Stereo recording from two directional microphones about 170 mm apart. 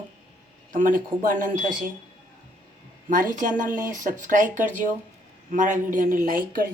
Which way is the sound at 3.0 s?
50° right (ahead or behind).